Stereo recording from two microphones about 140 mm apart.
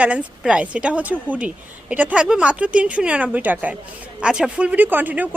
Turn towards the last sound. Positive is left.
turn(degrees=-10)  # may be behind; listen again after turning